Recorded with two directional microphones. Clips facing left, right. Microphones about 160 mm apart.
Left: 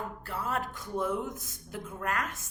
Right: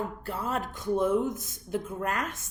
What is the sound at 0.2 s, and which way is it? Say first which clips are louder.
A woman's voice: right 2 dB; 25° right (ahead or behind).